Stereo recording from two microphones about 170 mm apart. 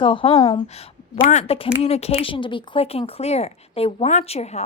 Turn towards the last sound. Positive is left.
turn(degrees=40)  # may be behind; listen again after turning